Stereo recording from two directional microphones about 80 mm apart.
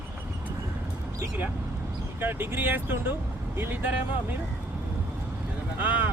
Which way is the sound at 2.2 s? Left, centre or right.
Right.